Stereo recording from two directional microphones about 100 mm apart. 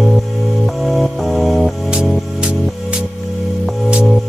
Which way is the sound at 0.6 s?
Centre (ahead or behind).